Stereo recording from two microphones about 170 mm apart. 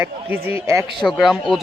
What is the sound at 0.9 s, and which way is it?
Speech, centre (ahead or behind).